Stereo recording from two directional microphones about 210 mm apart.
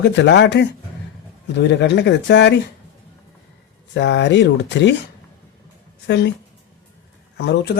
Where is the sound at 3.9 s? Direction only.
60° left (ahead or behind).